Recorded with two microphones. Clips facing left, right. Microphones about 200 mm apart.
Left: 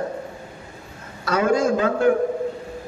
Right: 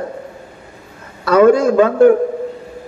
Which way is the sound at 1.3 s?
60° right (ahead or behind).